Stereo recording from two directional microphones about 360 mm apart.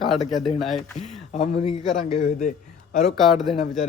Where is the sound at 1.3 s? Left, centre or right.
Centre.